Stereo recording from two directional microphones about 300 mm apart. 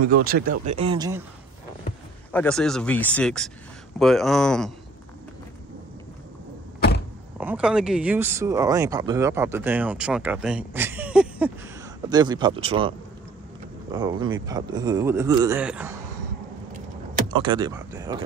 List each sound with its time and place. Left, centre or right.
0.0 s speech: right; by 1.2 s centre
2.3 s speech: centre
7.3 s speech: centre
13.9 s speech: centre
17.3 s speech: centre